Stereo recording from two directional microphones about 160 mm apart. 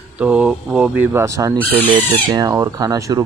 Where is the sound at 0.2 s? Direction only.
5° right (ahead or behind).